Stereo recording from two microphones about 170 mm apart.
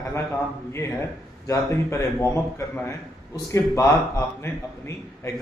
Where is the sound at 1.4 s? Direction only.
15° left (ahead or behind).